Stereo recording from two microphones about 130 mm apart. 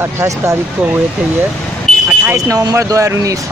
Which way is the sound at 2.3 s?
25° right (ahead or behind).